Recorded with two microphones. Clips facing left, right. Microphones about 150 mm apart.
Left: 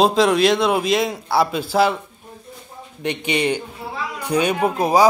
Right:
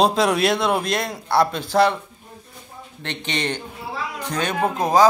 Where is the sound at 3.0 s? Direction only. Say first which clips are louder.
Left 6 dB; 10° left (ahead or behind).